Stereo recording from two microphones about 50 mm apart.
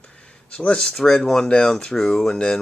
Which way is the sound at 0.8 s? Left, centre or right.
Centre.